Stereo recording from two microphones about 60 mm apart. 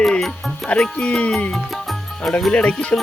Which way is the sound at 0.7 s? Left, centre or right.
Centre.